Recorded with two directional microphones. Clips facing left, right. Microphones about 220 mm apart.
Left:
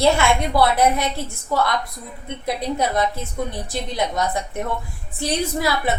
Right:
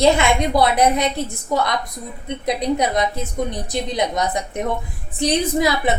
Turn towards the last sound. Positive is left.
turn(degrees=-20)  # may be behind; listen again after turning